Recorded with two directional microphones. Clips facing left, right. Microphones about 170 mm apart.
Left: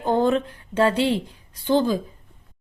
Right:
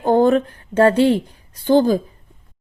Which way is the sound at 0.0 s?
50° right (ahead or behind).